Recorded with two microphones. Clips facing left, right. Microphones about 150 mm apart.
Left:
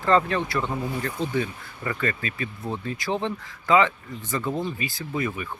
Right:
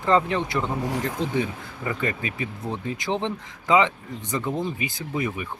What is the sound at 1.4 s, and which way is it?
Speech, 15° right (ahead or behind).